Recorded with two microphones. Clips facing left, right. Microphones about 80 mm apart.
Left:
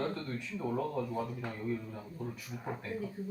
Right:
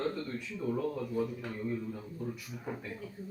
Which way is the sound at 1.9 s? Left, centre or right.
Centre.